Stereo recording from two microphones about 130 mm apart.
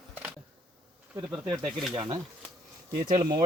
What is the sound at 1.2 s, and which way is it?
Speech, centre (ahead or behind).